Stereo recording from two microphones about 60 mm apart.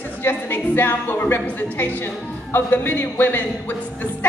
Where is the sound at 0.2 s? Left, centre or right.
Left.